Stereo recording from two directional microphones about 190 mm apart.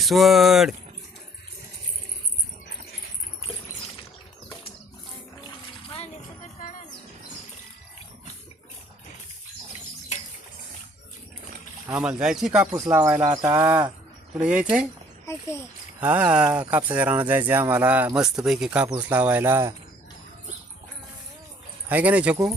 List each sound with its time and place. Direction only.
0.0 s speech: centre (ahead or behind)
6.6 s music: 45° left (ahead or behind)
11.9 s speech: 5° right (ahead or behind)
12.7 s speech: 15° right (ahead or behind)
14.3 s speech: 5° right (ahead or behind)
15.3 s speech: 15° left (ahead or behind)
16.0 s speech: 10° right (ahead or behind)
21.8 s speech: 10° right (ahead or behind)